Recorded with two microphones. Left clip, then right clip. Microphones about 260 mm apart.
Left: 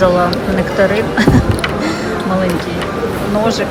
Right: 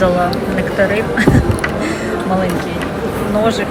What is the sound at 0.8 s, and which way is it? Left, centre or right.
Speech, centre.